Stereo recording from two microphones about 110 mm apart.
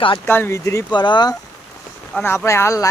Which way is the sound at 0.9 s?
45° left (ahead or behind).